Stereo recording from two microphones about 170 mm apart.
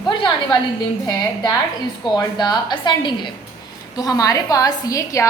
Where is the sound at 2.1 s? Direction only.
25° left (ahead or behind).